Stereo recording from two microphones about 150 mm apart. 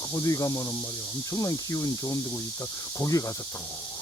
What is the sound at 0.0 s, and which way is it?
Speech, 20° left (ahead or behind).